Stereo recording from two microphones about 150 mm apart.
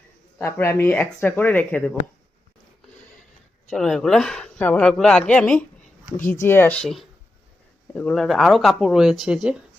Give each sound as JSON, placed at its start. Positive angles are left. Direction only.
{"t": 0.3, "sound": "speech", "side_deg": 15}
{"t": 3.7, "sound": "speech", "side_deg": 0}
{"t": 6.8, "sound": "speech", "side_deg": 0}